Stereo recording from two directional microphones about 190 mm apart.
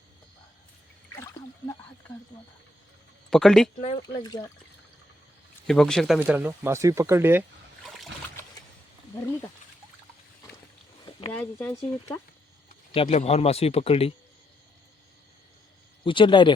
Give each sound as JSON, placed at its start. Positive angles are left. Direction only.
{"t": 1.1, "sound": "a sound", "side_deg": 15}
{"t": 3.2, "sound": "speech", "side_deg": 5}
{"t": 4.2, "sound": "speech", "side_deg": 20}
{"t": 5.6, "sound": "speech", "side_deg": 0}
{"t": 9.1, "sound": "speech", "side_deg": 15}
{"t": 11.3, "sound": "speech", "side_deg": 10}
{"t": 12.9, "sound": "a man's voice", "side_deg": 30}
{"t": 16.0, "sound": "speech", "side_deg": 25}